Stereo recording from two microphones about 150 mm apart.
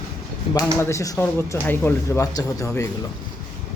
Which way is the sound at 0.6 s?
20° left (ahead or behind).